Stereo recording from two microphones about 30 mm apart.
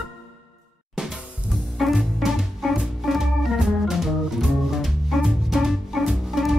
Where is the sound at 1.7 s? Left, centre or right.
Centre.